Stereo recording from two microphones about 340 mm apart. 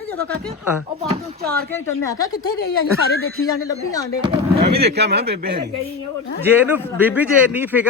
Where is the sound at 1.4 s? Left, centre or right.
Right.